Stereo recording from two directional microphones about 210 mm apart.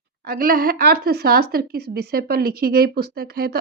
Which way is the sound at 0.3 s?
45° right (ahead or behind).